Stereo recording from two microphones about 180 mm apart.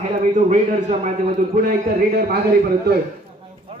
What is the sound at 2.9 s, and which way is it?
Speech, 65° right (ahead or behind).